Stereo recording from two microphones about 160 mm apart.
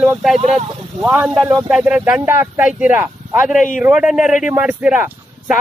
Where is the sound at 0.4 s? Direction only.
40° right (ahead or behind).